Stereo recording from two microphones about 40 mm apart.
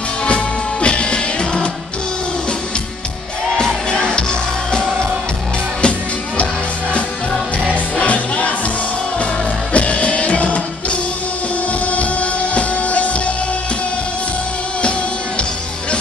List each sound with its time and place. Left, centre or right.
0.2 s music: left
3.5 s music: centre
8.0 s music: left
14.8 s music: left